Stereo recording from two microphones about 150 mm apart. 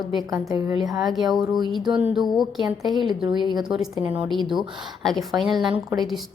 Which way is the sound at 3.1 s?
30° right (ahead or behind).